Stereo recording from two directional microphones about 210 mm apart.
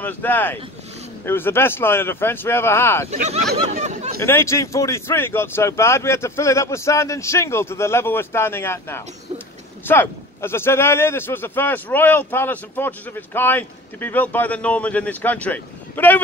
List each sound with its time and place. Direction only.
0.0 s a man's voice: 10° left (ahead or behind)
3.1 s speech: 30° right (ahead or behind)
3.7 s a sound: 35° right (ahead or behind)
4.2 s a man's voice: 10° left (ahead or behind)